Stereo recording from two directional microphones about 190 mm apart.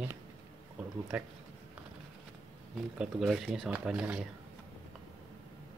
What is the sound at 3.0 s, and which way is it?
Speech, centre (ahead or behind).